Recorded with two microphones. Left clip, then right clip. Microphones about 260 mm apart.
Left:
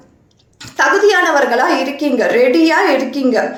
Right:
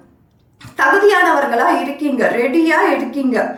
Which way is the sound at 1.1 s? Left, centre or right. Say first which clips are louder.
Left 1 dB; centre.